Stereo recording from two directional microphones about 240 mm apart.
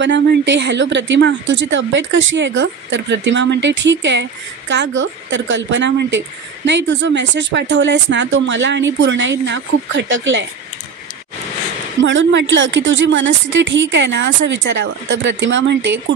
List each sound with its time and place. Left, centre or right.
0.0 s speech: right
12.0 s speech: right